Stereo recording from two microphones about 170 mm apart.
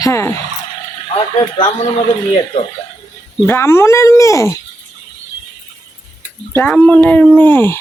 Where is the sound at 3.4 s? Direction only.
15° left (ahead or behind).